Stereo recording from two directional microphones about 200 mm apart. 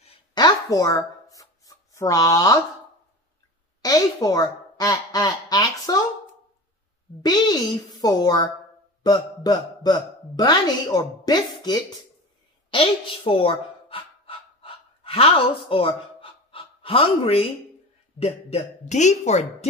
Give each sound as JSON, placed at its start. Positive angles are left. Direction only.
{"t": 0.0, "sound": "a sound", "side_deg": 20}
{"t": 3.8, "sound": "speech", "side_deg": 20}
{"t": 7.2, "sound": "a woman's voice", "side_deg": 20}
{"t": 12.7, "sound": "pant", "side_deg": 25}
{"t": 18.2, "sound": "speech", "side_deg": 35}